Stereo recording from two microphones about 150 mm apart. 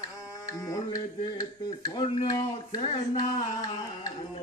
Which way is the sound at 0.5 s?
20° left (ahead or behind).